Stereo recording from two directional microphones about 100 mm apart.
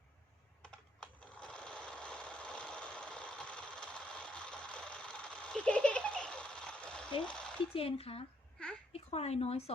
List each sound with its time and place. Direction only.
1.0 s sewing machine: 10° left (ahead or behind)
7.3 s a sound: 10° left (ahead or behind)
7.7 s speech: 70° left (ahead or behind)
8.9 s speech: 90° left